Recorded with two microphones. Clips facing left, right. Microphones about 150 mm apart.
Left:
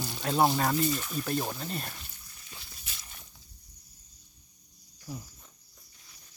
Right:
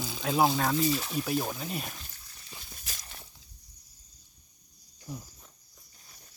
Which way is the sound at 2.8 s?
40° right (ahead or behind).